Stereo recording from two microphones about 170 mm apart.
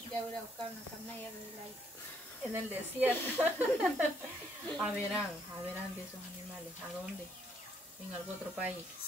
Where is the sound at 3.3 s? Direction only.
10° right (ahead or behind).